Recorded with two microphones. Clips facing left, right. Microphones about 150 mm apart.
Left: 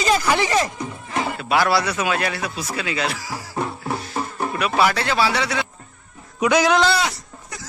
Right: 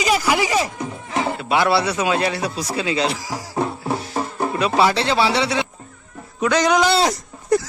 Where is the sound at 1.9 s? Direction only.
25° right (ahead or behind).